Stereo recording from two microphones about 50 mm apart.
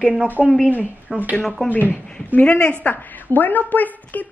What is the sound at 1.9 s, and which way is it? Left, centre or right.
Speech, left.